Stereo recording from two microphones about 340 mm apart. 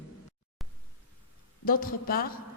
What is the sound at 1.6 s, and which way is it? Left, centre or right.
Speech, left.